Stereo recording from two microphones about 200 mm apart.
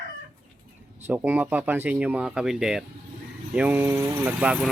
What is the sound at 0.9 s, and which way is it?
Speech, 10° right (ahead or behind).